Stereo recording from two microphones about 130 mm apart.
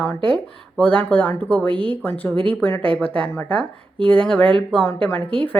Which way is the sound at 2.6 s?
15° left (ahead or behind).